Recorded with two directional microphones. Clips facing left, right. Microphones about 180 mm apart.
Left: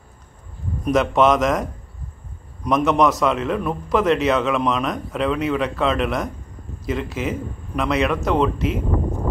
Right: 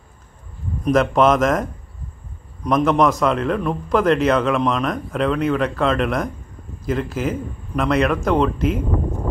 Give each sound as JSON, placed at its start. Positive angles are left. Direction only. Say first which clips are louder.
{"t": 0.8, "sound": "a man's voice", "louder": "right 1 dB", "side_deg": 0}